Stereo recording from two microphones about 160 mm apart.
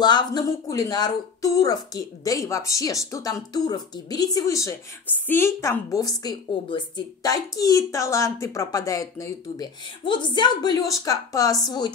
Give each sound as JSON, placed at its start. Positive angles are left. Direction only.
{"t": 0.0, "sound": "speech", "side_deg": 25}